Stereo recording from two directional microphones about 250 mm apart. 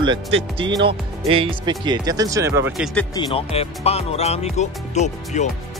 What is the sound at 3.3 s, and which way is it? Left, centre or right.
Speech, left.